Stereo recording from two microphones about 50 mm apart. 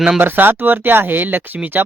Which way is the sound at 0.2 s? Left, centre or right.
Right.